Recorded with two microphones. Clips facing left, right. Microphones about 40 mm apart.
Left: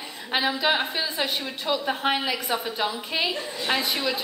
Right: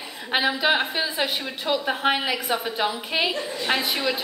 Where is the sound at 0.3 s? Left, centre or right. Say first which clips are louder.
Right 2 dB; centre.